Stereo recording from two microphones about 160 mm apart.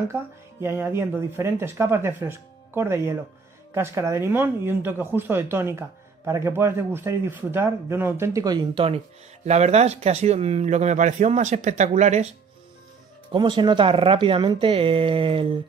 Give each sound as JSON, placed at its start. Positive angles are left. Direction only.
{"t": 0.1, "sound": "speech", "side_deg": -15}
{"t": 13.3, "sound": "speech", "side_deg": -30}